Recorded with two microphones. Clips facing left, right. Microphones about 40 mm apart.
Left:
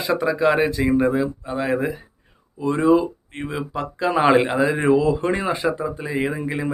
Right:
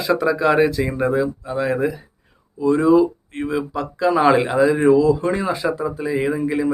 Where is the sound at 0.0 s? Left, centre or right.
Centre.